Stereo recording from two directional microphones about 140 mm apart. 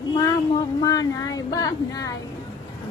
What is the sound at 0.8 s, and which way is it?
Speech, 25° left (ahead or behind).